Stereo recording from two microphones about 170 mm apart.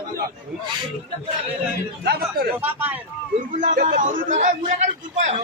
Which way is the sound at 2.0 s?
65° right (ahead or behind).